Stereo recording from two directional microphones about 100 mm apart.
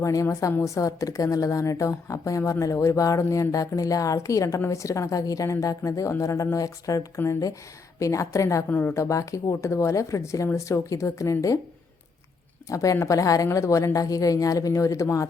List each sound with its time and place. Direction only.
0.0 s a woman's voice: 35° left (ahead or behind)
12.6 s a woman's voice: 35° left (ahead or behind)